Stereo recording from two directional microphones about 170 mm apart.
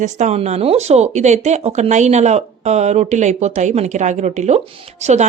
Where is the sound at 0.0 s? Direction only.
45° right (ahead or behind).